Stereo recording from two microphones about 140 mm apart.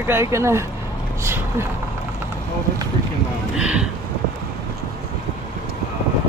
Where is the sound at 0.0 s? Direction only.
15° right (ahead or behind).